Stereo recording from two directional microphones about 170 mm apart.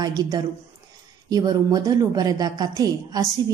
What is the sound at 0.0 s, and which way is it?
A woman's voice, 20° right (ahead or behind).